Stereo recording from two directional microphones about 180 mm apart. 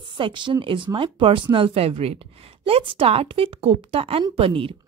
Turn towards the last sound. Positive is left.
turn(degrees=-30)  # may be behind; listen again after turning